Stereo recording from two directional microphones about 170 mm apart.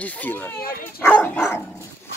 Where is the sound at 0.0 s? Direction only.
10° left (ahead or behind).